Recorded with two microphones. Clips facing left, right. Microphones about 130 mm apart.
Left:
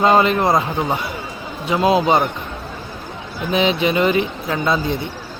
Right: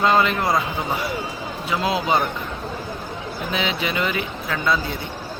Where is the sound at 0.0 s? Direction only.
25° left (ahead or behind).